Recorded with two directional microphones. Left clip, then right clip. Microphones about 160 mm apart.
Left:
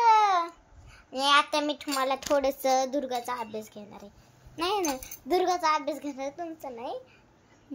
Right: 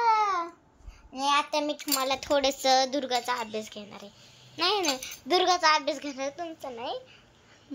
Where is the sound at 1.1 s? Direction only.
45° left (ahead or behind).